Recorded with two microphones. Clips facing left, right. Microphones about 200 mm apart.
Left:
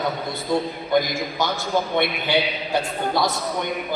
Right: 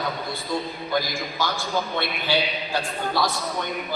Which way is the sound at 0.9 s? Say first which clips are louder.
Left 6 dB; 20° left (ahead or behind).